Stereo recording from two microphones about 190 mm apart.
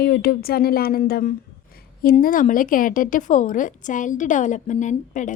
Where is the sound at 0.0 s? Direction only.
55° left (ahead or behind).